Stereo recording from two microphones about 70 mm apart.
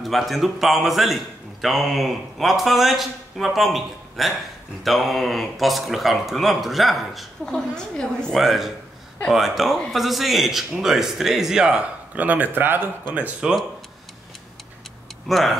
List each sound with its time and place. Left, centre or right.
0.0 s a man's voice: centre
8.4 s a man's voice: centre; by 12.9 s right
13.1 s speech: centre
15.2 s a man's voice: centre